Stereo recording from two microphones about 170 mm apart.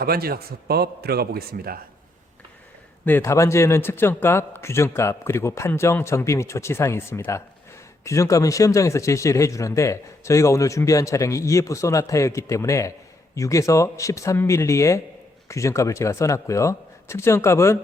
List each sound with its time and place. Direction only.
0.0 s a man's voice: 65° right (ahead or behind)
3.1 s a man's voice: 15° left (ahead or behind)